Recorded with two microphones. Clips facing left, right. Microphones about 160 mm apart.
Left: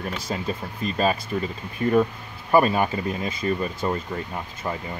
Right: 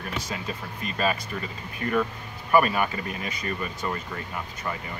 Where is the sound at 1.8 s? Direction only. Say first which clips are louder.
Left 6 dB; 20° left (ahead or behind).